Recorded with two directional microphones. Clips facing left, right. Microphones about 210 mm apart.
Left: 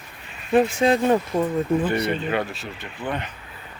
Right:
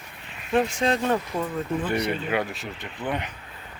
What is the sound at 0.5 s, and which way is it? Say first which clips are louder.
Speech: left 5 dB; 5° left (ahead or behind).